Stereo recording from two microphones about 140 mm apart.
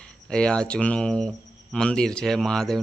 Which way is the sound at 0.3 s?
5° left (ahead or behind).